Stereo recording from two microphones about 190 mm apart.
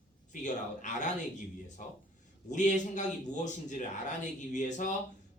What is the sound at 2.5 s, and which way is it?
A man's voice, 40° left (ahead or behind).